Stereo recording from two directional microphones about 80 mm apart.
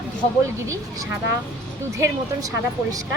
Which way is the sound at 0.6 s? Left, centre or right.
Right.